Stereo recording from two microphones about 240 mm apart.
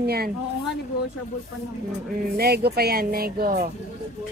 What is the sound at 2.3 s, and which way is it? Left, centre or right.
A woman's voice, right.